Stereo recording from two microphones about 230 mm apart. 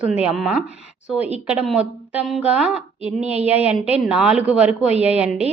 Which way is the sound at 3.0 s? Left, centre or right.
Left.